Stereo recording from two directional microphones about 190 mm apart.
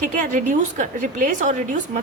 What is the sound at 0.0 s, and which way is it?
A woman's voice, 40° right (ahead or behind).